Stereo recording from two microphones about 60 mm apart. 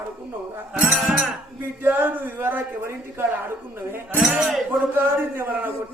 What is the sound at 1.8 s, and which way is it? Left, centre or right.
Music, right.